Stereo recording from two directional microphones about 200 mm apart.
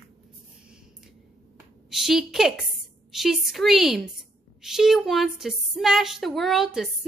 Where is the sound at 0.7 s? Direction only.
Centre (ahead or behind).